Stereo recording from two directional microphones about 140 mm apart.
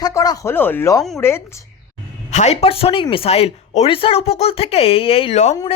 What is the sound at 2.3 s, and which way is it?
Speech, 55° left (ahead or behind).